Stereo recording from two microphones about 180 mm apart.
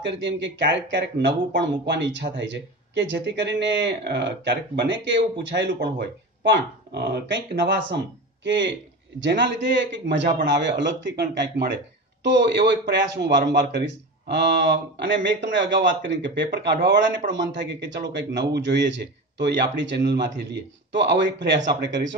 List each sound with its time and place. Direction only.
0.0 s a man's voice: 80° right
5.5 s a man's voice: 70° right (ahead or behind)